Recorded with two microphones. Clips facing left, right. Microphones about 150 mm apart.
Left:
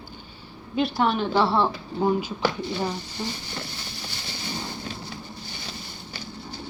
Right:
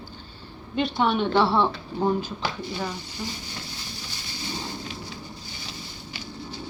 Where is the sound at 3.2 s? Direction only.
30° left (ahead or behind).